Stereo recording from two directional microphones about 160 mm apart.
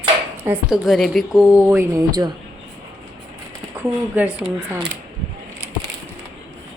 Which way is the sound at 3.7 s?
10° right (ahead or behind).